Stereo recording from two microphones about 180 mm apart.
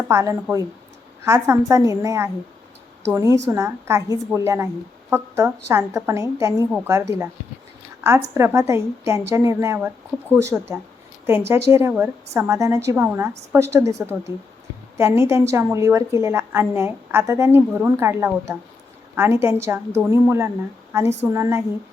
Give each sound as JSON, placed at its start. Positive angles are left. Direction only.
{"t": 0.1, "sound": "a woman's voice", "side_deg": -15}
{"t": 8.4, "sound": "a woman's voice", "side_deg": -15}